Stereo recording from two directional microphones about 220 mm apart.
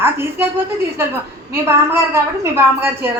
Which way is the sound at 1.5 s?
10° right (ahead or behind).